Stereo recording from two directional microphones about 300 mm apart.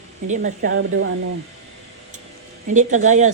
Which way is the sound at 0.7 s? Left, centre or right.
Right.